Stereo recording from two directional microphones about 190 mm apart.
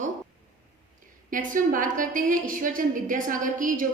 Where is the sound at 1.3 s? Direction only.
45° right (ahead or behind).